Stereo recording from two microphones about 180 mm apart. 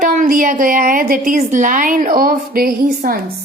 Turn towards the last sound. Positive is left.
turn(degrees=-55)  # may be behind; listen again after turning